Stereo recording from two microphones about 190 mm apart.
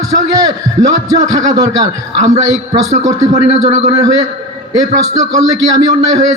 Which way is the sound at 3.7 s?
35° right (ahead or behind).